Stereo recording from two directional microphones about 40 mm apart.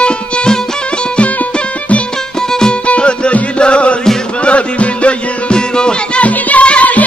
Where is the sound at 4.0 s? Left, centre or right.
Centre.